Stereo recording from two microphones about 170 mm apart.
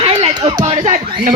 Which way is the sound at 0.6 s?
45° right (ahead or behind).